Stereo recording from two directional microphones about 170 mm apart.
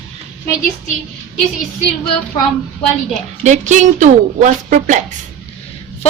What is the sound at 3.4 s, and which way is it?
A woman's voice, 45° right (ahead or behind).